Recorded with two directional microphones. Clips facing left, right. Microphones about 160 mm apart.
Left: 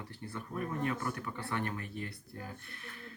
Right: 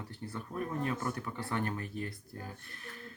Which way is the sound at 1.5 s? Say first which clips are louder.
Right 2 dB; 35° right (ahead or behind).